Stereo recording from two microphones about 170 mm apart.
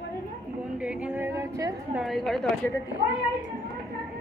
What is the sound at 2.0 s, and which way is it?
Speech, centre (ahead or behind).